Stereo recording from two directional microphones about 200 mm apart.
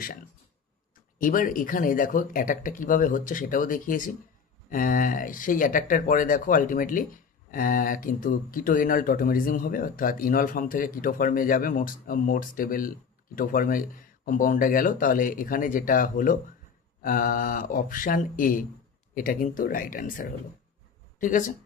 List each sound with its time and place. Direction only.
1.2 s speech: 45° left (ahead or behind)